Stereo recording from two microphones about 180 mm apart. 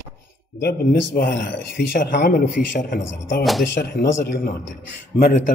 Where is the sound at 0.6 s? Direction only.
60° left (ahead or behind).